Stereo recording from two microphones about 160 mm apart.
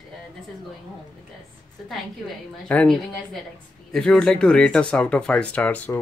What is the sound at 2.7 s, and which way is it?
A woman's voice, 5° left (ahead or behind).